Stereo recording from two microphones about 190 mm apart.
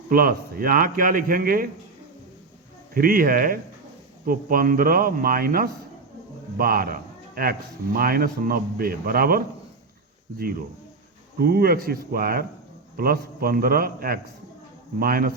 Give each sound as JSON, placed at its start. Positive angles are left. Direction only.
{"t": 0.1, "sound": "a man's voice", "side_deg": -50}
{"t": 2.9, "sound": "a man's voice", "side_deg": -50}
{"t": 11.3, "sound": "a man's voice", "side_deg": -50}